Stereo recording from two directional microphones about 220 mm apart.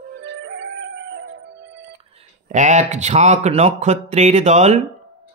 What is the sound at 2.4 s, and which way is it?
Speech, 35° right (ahead or behind).